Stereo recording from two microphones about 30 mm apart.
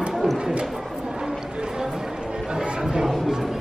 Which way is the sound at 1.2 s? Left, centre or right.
Right.